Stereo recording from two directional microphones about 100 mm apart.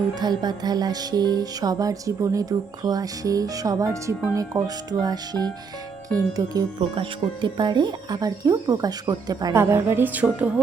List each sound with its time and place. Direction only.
0.1 s speech: 45° right (ahead or behind)
6.7 s speech: 60° right (ahead or behind); by 9.6 s 40° right (ahead or behind)
9.6 s speech: 25° right (ahead or behind)